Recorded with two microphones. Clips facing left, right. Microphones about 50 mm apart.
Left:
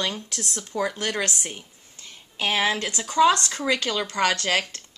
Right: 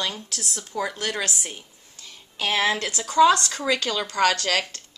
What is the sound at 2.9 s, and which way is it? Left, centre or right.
A woman's voice, left.